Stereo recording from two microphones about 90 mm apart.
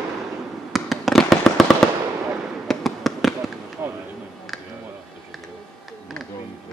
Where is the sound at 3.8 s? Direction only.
25° right (ahead or behind).